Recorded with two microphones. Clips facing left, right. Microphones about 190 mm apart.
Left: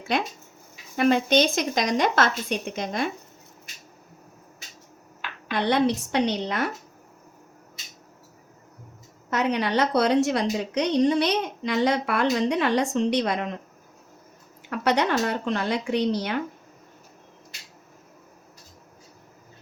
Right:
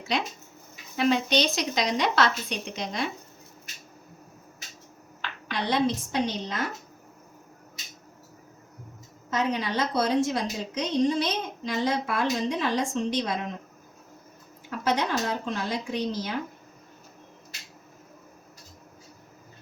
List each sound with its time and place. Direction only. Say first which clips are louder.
0.1 s a woman's voice: left 3 dB; 55° left (ahead or behind)
5.5 s a woman's voice: left 4 dB; 60° left (ahead or behind)
9.3 s a woman's voice: left 4 dB; 65° left (ahead or behind)
14.7 s a woman's voice: left 4 dB; 70° left (ahead or behind)